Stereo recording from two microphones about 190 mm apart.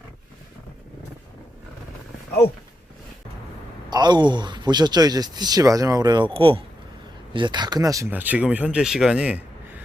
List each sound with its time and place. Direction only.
3.8 s speech: 20° right (ahead or behind); by 9.8 s 5° right (ahead or behind)